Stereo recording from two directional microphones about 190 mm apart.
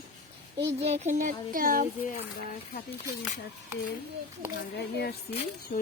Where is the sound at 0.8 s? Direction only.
35° right (ahead or behind).